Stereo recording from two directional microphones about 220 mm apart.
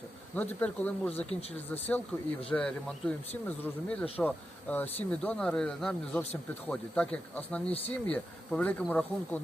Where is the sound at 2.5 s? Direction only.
5° left (ahead or behind).